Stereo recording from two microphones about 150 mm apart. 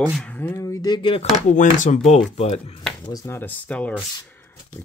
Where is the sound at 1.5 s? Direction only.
55° left (ahead or behind).